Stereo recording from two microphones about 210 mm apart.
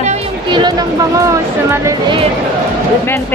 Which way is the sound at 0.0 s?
20° right (ahead or behind).